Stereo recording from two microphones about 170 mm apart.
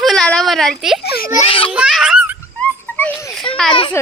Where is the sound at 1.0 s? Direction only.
60° left (ahead or behind).